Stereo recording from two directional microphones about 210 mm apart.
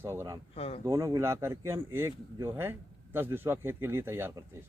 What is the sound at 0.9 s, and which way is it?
Speech, 15° right (ahead or behind).